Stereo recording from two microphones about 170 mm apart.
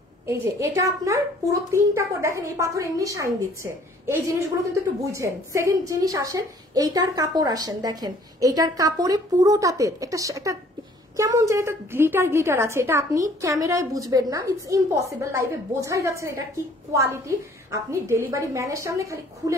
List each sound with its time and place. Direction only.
0.3 s a woman's voice: 15° right (ahead or behind)